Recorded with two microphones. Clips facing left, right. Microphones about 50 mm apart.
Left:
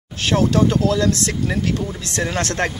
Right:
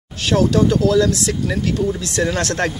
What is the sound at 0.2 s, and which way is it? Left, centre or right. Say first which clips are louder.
Speech: right 1 dB; left.